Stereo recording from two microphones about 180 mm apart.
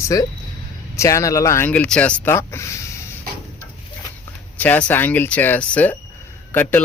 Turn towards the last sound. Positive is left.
turn(degrees=10)  # may be behind; listen again after turning